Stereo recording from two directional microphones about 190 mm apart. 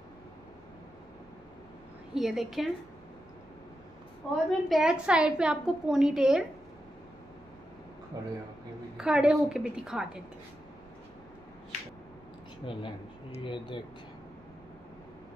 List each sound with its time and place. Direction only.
2.1 s a woman's voice: centre (ahead or behind)
4.5 s a woman's voice: centre (ahead or behind)
8.1 s a man's voice: 20° right (ahead or behind)
8.9 s a woman's voice: 5° right (ahead or behind)
12.6 s speech: 25° left (ahead or behind)